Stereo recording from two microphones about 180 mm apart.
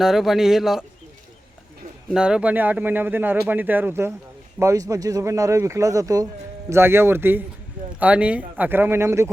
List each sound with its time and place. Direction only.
0.0 s speech: centre (ahead or behind)
2.0 s speech: 5° right (ahead or behind)